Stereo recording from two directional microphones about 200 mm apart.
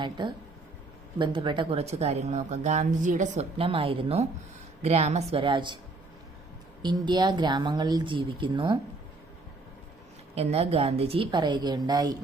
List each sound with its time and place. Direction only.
0.0 s a woman's voice: 25° right (ahead or behind)
6.8 s speech: 20° right (ahead or behind)
10.3 s speech: 30° right (ahead or behind)